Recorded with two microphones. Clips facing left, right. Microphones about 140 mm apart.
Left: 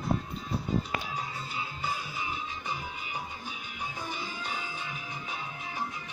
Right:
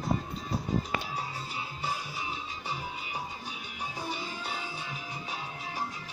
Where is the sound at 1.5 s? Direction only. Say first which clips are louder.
Left 1 dB; 35° right (ahead or behind).